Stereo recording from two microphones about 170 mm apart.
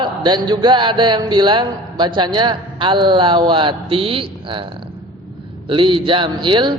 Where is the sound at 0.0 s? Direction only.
25° right (ahead or behind).